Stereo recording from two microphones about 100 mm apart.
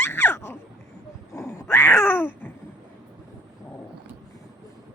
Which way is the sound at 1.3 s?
25° left (ahead or behind).